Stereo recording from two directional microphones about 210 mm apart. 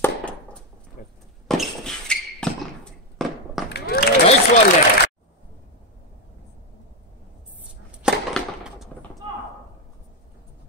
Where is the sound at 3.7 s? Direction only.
50° left (ahead or behind).